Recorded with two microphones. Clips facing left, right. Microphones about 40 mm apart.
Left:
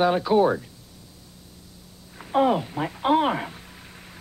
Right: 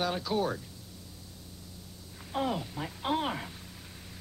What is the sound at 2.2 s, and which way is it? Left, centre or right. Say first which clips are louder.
Speech: left 11 dB; left.